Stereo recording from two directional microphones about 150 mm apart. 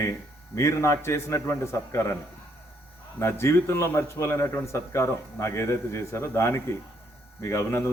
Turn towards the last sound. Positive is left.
turn(degrees=20)  # may be behind; listen again after turning